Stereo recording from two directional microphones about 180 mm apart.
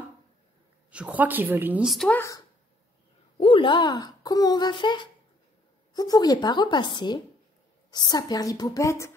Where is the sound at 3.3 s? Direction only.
30° left (ahead or behind).